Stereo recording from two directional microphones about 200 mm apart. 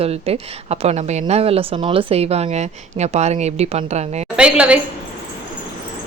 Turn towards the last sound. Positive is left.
turn(degrees=-5)  # may be behind; listen again after turning